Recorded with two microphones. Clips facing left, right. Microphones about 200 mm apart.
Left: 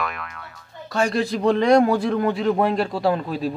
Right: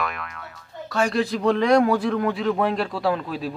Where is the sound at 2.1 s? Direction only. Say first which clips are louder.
Left 2 dB; 30° left (ahead or behind).